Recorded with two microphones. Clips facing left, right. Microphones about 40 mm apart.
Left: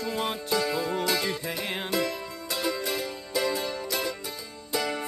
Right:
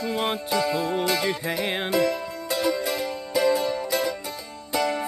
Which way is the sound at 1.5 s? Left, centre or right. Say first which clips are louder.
Right 5 dB; right.